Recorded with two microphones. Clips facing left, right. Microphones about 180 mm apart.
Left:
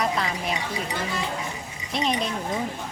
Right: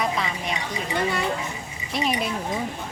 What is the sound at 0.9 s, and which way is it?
Speech, 65° right (ahead or behind).